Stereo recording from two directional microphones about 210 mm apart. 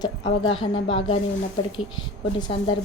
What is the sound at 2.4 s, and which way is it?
Speech, 25° left (ahead or behind).